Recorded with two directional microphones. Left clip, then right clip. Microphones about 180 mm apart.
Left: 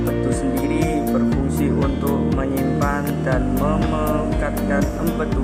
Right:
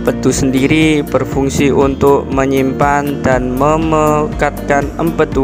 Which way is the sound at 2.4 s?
45° right (ahead or behind).